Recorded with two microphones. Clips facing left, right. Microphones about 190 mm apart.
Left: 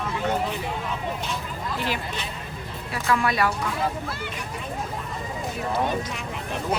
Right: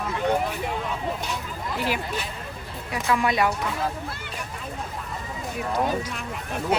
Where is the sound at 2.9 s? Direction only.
15° right (ahead or behind).